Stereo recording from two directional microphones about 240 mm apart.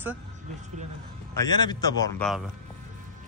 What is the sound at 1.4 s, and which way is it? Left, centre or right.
Speech, centre.